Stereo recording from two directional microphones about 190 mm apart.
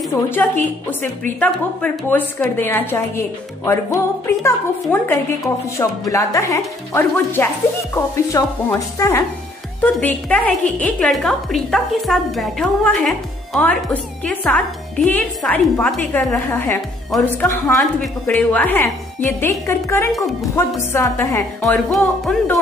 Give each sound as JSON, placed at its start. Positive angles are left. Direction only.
{"t": 0.1, "sound": "a woman's voice", "side_deg": 10}
{"t": 21.7, "sound": "music", "side_deg": 0}